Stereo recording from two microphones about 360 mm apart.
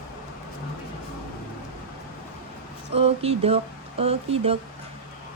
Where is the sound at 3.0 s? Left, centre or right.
Centre.